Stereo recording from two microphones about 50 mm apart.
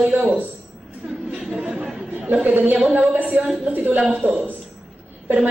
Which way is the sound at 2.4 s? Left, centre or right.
Right.